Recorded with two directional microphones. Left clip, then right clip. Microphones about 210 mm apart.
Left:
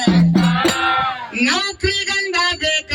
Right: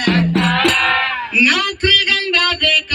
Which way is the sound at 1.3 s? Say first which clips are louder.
Right 5 dB; 25° left (ahead or behind).